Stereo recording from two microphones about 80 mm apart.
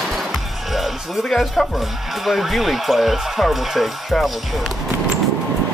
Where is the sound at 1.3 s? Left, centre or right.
Centre.